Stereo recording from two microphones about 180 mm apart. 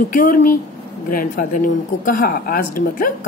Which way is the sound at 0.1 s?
50° left (ahead or behind).